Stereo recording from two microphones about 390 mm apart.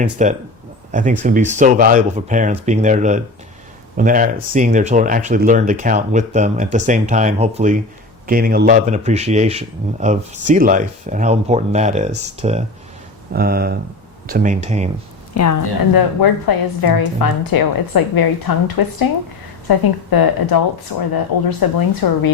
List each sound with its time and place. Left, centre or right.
0.0 s speech: centre
15.6 s a woman's voice: left